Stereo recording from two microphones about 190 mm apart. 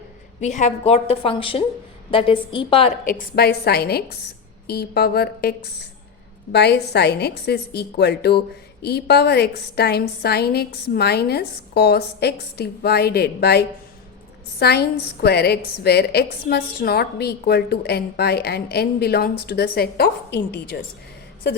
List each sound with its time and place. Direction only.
0.3 s a woman's voice: 40° left (ahead or behind)
3.0 s a woman's voice: 50° left (ahead or behind)